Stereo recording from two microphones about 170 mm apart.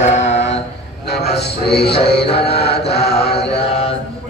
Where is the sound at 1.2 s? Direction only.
70° left (ahead or behind).